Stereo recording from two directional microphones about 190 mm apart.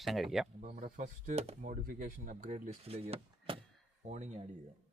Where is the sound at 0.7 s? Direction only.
45° right (ahead or behind).